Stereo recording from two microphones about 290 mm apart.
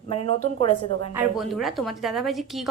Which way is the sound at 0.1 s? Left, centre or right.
Centre.